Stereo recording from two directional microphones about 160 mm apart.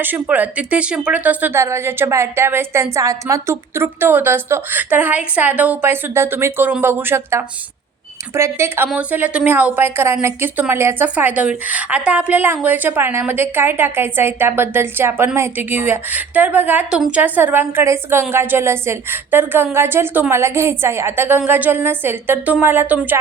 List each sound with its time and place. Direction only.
0.0 s a woman's voice: 10° right (ahead or behind)